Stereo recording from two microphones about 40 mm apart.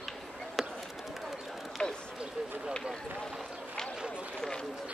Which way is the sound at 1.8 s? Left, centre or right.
Left.